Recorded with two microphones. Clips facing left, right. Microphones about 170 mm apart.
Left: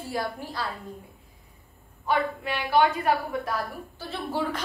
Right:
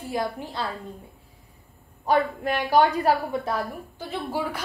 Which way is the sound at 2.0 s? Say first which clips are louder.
Right 4 dB; 40° right (ahead or behind).